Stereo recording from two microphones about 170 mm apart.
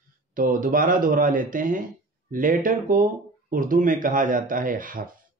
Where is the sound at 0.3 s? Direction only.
55° right (ahead or behind).